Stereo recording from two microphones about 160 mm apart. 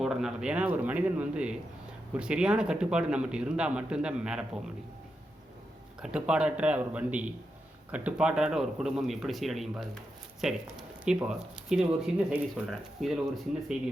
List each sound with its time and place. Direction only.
0.0 s a man's voice: 5° right (ahead or behind)
6.0 s a man's voice: 5° right (ahead or behind)